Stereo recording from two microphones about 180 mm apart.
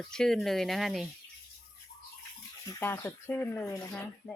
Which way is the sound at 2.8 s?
15° left (ahead or behind).